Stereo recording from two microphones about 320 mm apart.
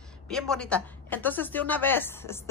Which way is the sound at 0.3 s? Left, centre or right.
Centre.